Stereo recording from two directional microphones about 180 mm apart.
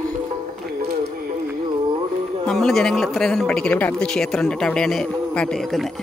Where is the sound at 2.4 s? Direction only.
Centre (ahead or behind).